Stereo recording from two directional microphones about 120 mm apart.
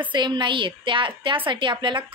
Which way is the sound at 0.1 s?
40° right (ahead or behind).